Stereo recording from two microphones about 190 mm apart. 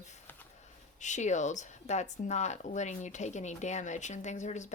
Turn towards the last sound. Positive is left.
turn(degrees=40)  # may be behind; listen again after turning